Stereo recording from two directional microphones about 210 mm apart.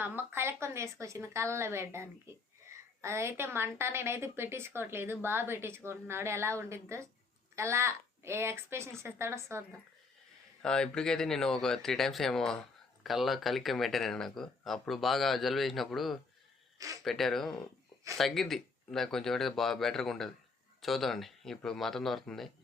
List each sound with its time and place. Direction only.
0.0 s a woman's voice: 10° right (ahead or behind)
10.6 s speech: 5° left (ahead or behind)
16.7 s speech: 15° right (ahead or behind)
17.0 s speech: centre (ahead or behind)